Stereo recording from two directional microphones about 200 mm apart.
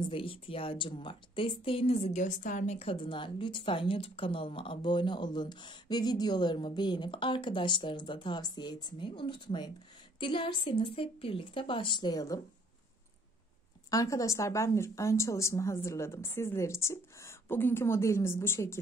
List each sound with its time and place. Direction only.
0.1 s speech: 25° left (ahead or behind)
13.8 s a woman's voice: 15° left (ahead or behind)